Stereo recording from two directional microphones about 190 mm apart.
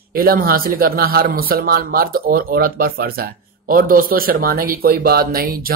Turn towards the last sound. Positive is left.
turn(degrees=-50)  # may be behind; listen again after turning